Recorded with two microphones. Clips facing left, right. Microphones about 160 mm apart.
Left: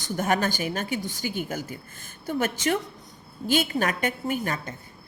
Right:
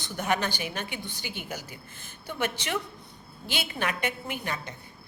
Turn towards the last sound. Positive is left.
turn(degrees=45)  # may be behind; listen again after turning